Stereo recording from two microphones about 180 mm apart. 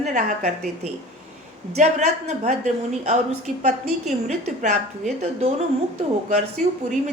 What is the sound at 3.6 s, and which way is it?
A woman's voice, 40° right (ahead or behind).